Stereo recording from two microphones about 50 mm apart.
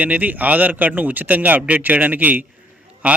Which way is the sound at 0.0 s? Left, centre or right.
Right.